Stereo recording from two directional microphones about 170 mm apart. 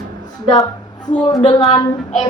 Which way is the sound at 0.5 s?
20° left (ahead or behind).